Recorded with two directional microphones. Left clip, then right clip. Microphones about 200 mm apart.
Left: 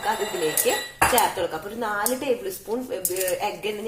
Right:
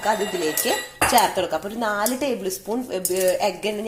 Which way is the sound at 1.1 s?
50° right (ahead or behind).